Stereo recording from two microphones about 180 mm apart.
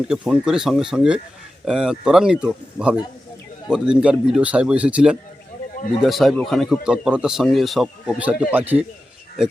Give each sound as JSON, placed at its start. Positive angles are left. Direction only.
{"t": 0.1, "sound": "speech", "side_deg": -5}